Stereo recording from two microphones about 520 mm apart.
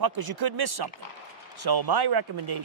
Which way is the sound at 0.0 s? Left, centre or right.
Right.